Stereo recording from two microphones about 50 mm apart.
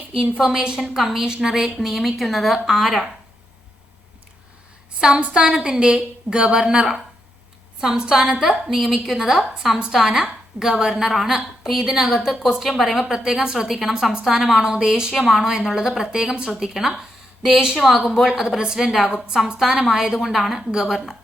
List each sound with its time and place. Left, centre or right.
0.3 s a woman's voice: centre
4.9 s a woman's voice: centre
11.1 s a woman's voice: centre